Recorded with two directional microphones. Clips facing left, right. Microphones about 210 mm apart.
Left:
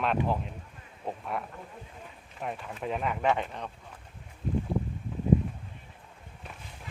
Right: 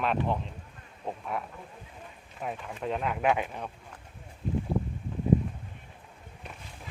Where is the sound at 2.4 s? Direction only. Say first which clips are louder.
Right 1 dB; centre (ahead or behind).